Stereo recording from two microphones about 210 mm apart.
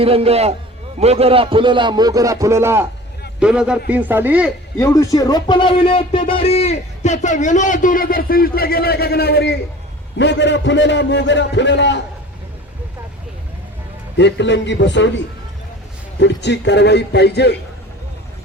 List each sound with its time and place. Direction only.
0.0 s a man's voice: 25° right (ahead or behind); by 4.5 s 5° right (ahead or behind)
4.8 s a man's voice: 15° left (ahead or behind); by 12.0 s 55° left (ahead or behind)
14.2 s a man's voice: 55° left (ahead or behind)
16.2 s a man's voice: 55° left (ahead or behind)